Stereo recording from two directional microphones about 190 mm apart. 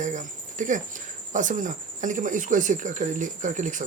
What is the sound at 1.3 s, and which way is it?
Speech, 40° right (ahead or behind).